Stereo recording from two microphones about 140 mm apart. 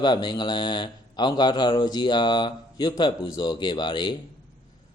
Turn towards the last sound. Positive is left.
turn(degrees=35)  # may be behind; listen again after turning